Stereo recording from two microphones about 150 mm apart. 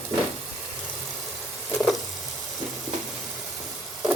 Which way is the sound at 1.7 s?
Centre (ahead or behind).